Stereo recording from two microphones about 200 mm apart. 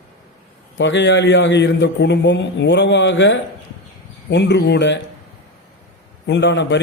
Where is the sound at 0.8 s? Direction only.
65° left (ahead or behind).